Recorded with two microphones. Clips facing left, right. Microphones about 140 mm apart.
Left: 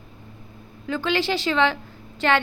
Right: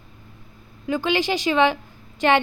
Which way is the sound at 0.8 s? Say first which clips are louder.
Right 2 dB; 15° right (ahead or behind).